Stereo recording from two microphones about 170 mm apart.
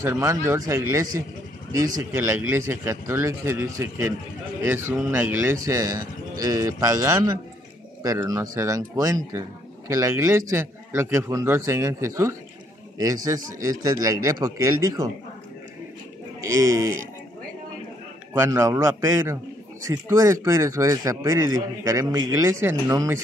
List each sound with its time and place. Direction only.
0.0 s a man's voice: 15° right (ahead or behind)
16.3 s a man's voice: 20° right (ahead or behind)
18.4 s a man's voice: 15° right (ahead or behind)